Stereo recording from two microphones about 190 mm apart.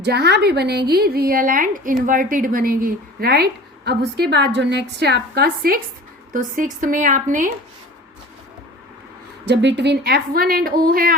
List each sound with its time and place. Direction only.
0.0 s a woman's voice: 60° right (ahead or behind); by 7.5 s 45° right (ahead or behind)
9.5 s a woman's voice: 65° right (ahead or behind); by 11.1 s 50° right (ahead or behind)